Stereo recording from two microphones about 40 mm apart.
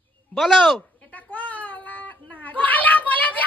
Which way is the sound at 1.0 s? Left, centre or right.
Left.